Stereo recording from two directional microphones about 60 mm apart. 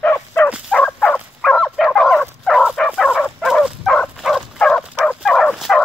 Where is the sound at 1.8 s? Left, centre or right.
Centre.